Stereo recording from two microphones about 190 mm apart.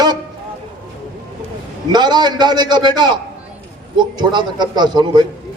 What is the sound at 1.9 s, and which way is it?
A man's voice, 20° right (ahead or behind).